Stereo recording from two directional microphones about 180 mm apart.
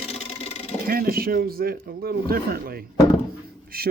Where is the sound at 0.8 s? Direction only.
55° right (ahead or behind).